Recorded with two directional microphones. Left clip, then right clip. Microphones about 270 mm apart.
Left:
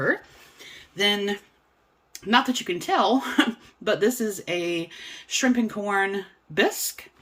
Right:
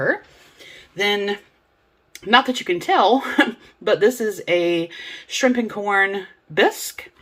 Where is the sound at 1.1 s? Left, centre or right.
Left.